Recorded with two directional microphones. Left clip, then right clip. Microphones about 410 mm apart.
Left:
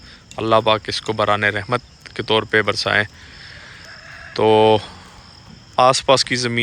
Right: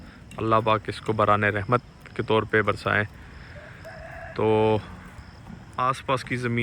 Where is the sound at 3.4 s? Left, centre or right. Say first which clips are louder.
Left 6 dB; right.